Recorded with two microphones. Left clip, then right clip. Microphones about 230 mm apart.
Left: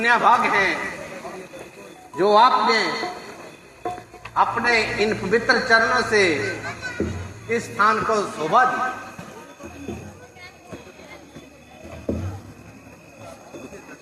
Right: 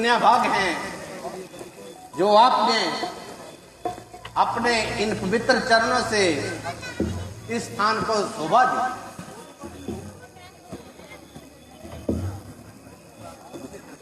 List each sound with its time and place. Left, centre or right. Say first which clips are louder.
0.0 s a man's voice: left 2 dB; right
2.1 s a man's voice: left 1 dB; right
3.8 s stir: left 1 dB; right
4.4 s a man's voice: left 2 dB; right